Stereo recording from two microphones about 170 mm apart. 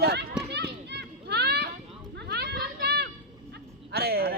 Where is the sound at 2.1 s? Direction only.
75° right (ahead or behind).